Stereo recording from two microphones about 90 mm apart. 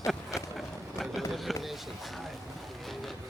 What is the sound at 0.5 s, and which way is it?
Run, centre (ahead or behind).